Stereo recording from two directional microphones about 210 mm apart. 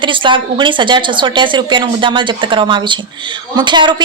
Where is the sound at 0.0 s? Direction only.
25° right (ahead or behind).